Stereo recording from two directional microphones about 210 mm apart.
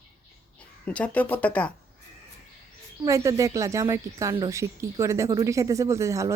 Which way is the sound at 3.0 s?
15° right (ahead or behind).